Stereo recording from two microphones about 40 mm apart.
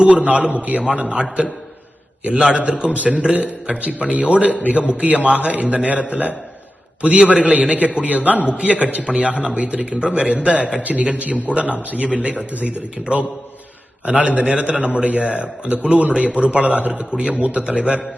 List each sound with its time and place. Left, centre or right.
0.0 s a man's voice: right
17.0 s a man's voice: right